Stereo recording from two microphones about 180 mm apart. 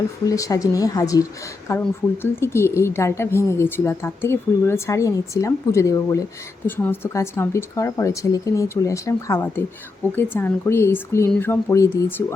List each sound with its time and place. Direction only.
0.3 s speech: 20° left (ahead or behind)